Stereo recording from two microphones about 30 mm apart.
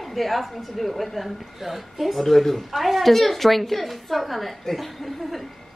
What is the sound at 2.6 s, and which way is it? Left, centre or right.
A man's voice, centre.